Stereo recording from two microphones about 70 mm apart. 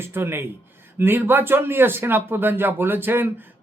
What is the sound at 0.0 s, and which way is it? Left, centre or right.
A man's voice, right.